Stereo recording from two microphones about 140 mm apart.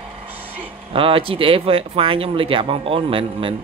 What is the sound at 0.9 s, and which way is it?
Speech, 40° right (ahead or behind).